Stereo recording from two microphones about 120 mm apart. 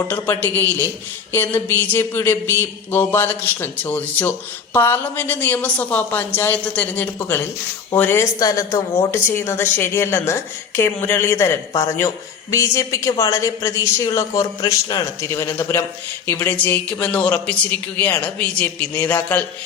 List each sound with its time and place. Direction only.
0.1 s speech: 15° left (ahead or behind)
8.2 s a man's voice: 30° left (ahead or behind)
15.2 s a man's voice: 20° left (ahead or behind)